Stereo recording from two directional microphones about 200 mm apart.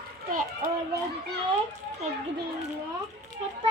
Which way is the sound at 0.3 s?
40° right (ahead or behind).